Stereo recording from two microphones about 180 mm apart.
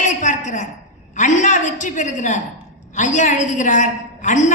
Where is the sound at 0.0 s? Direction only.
45° left (ahead or behind).